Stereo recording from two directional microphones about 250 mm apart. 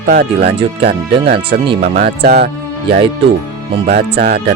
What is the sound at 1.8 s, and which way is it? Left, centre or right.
Speech, right.